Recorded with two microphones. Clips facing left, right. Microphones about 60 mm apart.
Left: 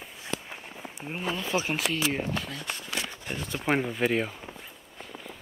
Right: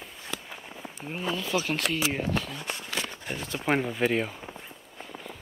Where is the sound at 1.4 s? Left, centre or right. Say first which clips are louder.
Even; left.